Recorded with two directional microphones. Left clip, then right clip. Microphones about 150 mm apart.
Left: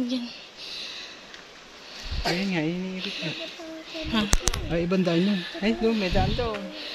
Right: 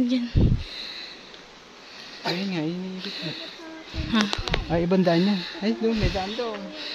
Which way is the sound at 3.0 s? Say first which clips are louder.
Left 1 dB; 25° right (ahead or behind).